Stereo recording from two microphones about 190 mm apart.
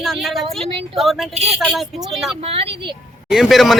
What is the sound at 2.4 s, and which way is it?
Speech, 30° right (ahead or behind).